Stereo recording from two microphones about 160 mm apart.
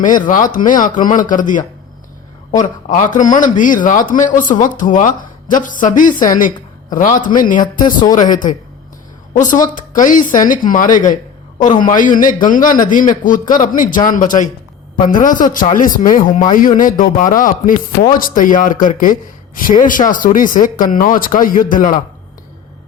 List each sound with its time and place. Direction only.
0.2 s speech: 55° left (ahead or behind)
2.9 s speech: 50° left (ahead or behind)
7.9 s speech: 30° left (ahead or behind)
8.1 s a woman's voice: 55° left (ahead or behind)